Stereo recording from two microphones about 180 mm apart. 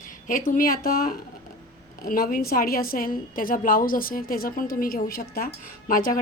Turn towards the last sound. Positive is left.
turn(degrees=50)  # may be behind; listen again after turning